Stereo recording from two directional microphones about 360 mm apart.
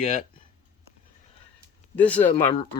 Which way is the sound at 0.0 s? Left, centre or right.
Left.